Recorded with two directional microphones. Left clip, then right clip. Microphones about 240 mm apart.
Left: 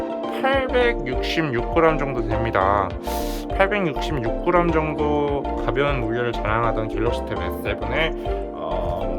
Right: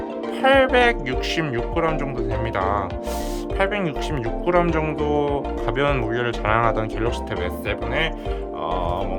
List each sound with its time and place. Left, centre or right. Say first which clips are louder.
0.4 s speech: right 4 dB; centre